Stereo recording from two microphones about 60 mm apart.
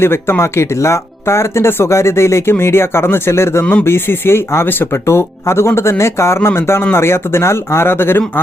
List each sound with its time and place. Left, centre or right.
0.0 s speech: left